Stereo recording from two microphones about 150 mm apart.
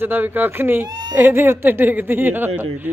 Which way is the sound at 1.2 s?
15° right (ahead or behind).